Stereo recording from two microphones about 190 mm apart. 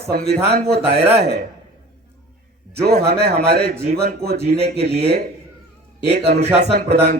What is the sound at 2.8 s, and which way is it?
Speech, 55° right (ahead or behind).